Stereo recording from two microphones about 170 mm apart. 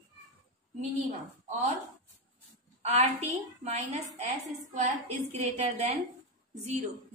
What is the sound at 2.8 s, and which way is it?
A woman's voice, 40° right (ahead or behind).